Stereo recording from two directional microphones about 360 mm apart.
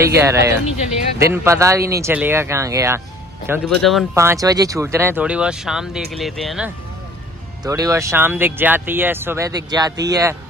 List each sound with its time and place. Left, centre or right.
0.0 s speech: centre